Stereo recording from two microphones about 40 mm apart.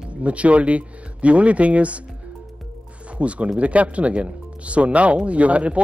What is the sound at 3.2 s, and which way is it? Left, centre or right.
Speech, right.